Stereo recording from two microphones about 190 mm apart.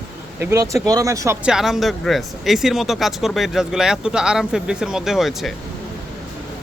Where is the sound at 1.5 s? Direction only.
Centre (ahead or behind).